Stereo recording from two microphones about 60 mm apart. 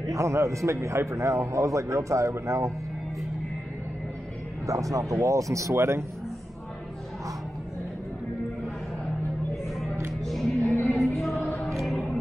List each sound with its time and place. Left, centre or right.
0.0 s speech: right
4.6 s speech: right
10.2 s music: centre